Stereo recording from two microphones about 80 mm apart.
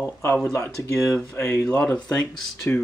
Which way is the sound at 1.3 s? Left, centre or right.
Left.